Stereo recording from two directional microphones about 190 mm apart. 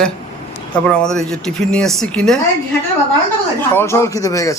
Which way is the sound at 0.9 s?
5° left (ahead or behind).